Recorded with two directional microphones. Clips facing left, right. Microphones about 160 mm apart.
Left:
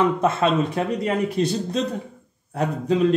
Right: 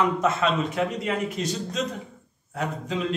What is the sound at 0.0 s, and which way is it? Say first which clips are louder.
A man's voice: left 3 dB; 30° left (ahead or behind).